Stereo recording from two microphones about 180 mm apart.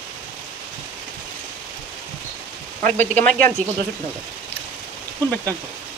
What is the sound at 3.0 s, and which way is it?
Speech, 10° left (ahead or behind).